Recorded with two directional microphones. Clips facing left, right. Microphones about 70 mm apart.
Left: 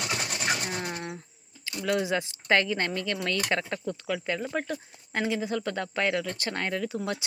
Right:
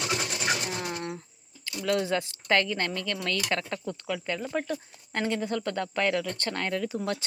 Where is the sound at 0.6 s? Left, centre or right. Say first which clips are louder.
Even; left.